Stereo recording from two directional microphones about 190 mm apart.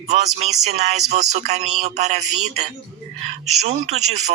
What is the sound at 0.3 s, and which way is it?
Speech, 35° right (ahead or behind).